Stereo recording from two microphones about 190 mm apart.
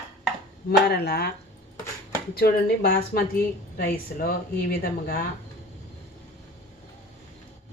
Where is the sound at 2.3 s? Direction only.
55° left (ahead or behind).